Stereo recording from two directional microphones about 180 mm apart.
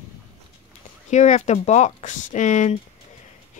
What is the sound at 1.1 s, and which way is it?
Speech, 40° left (ahead or behind).